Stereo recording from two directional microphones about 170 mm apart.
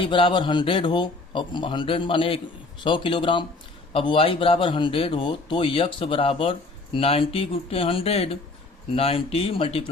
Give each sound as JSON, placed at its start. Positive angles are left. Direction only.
{"t": 0.0, "sound": "speech", "side_deg": 30}